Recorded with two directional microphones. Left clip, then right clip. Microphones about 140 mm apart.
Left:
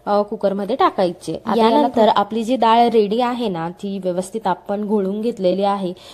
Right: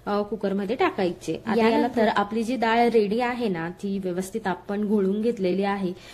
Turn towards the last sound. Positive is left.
turn(degrees=45)  # may be behind; listen again after turning